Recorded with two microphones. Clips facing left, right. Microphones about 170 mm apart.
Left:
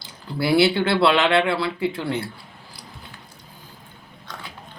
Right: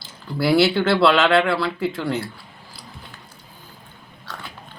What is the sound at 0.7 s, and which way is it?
Speech, 20° left (ahead or behind).